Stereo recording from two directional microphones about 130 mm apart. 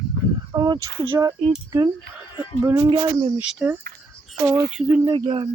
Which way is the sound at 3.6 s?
20° right (ahead or behind).